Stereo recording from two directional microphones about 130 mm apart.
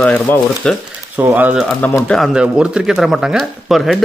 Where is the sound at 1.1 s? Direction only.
15° right (ahead or behind).